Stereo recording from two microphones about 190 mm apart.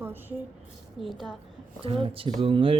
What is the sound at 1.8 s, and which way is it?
Speech, 30° right (ahead or behind).